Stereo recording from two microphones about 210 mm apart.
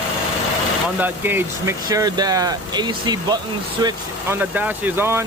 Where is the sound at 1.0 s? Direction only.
10° right (ahead or behind).